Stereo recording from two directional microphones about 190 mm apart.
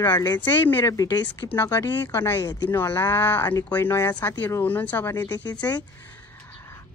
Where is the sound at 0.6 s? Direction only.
10° left (ahead or behind).